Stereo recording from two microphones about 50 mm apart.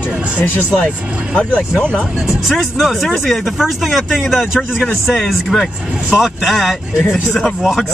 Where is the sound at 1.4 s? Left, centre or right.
Left.